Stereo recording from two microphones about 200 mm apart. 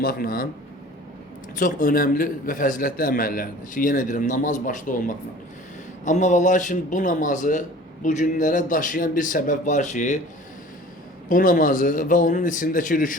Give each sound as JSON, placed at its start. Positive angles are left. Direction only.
{"t": 0.0, "sound": "a man's voice", "side_deg": 50}
{"t": 1.5, "sound": "a man's voice", "side_deg": 45}
{"t": 11.3, "sound": "a man's voice", "side_deg": 45}